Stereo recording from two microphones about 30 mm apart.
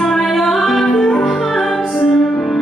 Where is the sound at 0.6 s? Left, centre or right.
Centre.